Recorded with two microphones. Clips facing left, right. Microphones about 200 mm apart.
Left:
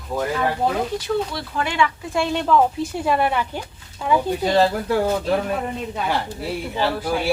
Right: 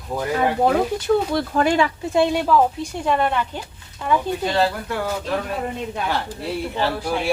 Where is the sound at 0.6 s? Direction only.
50° right (ahead or behind).